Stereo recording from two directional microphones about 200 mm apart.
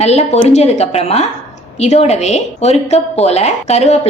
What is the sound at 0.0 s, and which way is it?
A woman's voice, 30° left (ahead or behind).